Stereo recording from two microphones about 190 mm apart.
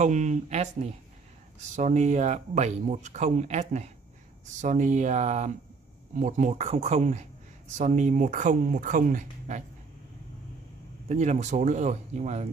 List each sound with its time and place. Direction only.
0.0 s speech: 40° right (ahead or behind)
11.1 s speech: 40° right (ahead or behind)